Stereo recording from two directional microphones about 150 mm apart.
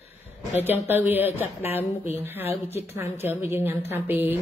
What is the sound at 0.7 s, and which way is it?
A woman's voice, 15° right (ahead or behind).